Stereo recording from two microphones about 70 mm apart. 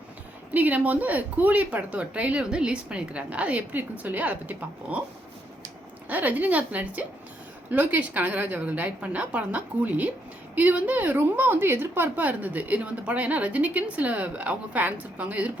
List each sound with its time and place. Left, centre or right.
0.5 s a woman's voice: right
6.1 s a woman's voice: right